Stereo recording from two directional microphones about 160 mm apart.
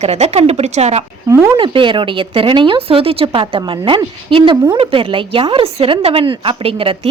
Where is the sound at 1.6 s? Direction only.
30° right (ahead or behind).